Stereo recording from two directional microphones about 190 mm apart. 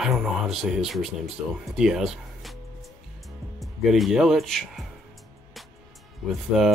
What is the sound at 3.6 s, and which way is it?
Speech, centre (ahead or behind).